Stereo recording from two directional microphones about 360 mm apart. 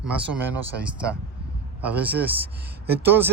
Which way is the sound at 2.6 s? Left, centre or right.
Right.